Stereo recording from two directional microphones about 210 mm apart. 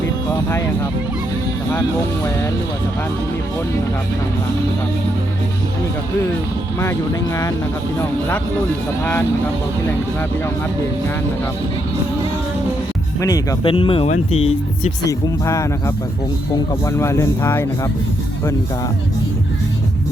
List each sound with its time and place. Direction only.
13.1 s speech: 15° left (ahead or behind)
16.8 s speech: 15° left (ahead or behind)